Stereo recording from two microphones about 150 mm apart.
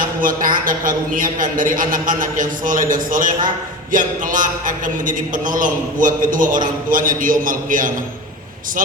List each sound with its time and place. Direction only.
0.0 s a man's voice: 65° right (ahead or behind)